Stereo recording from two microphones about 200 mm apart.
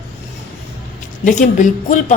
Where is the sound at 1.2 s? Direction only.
40° left (ahead or behind).